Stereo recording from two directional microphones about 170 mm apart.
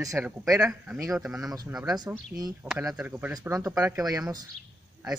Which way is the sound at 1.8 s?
20° right (ahead or behind).